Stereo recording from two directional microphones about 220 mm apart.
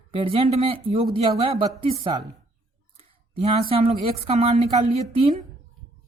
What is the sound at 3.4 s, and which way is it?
A woman's voice, 25° right (ahead or behind).